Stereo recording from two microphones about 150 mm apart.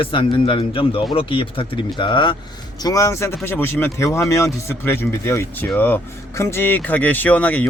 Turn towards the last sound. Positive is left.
turn(degrees=10)  # may be behind; listen again after turning